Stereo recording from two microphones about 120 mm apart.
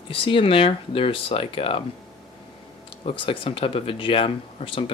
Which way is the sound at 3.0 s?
45° left (ahead or behind).